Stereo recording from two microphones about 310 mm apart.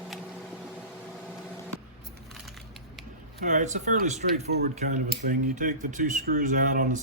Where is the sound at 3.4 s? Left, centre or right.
Right.